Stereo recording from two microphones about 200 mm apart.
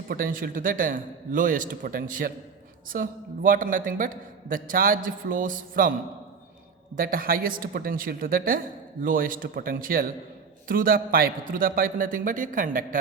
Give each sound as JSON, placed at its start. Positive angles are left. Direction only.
{"t": 0.1, "sound": "a man's voice", "side_deg": -45}
{"t": 6.9, "sound": "a man's voice", "side_deg": -45}